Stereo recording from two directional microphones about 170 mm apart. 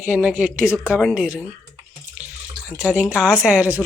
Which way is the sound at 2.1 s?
5° right (ahead or behind).